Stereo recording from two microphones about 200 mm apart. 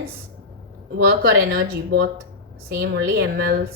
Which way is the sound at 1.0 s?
55° right (ahead or behind).